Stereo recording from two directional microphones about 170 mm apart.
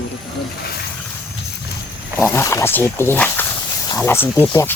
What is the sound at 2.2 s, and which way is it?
Speech, 15° left (ahead or behind).